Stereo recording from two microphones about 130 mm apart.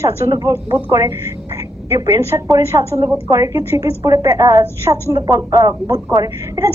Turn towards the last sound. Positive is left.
turn(degrees=-25)  # may be behind; listen again after turning